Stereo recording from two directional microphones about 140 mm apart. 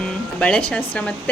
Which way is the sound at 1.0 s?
10° left (ahead or behind).